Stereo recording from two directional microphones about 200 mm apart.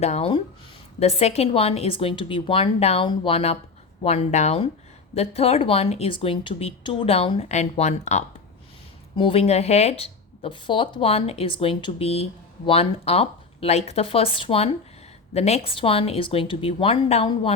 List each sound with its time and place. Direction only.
0.0 s a woman's voice: 30° left (ahead or behind)